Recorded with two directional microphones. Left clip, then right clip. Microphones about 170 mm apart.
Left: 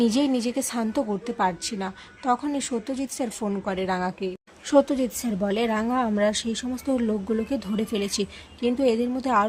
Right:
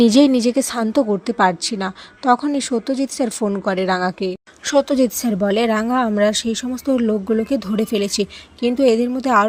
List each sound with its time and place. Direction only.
0.0 s a woman's voice: 40° right (ahead or behind)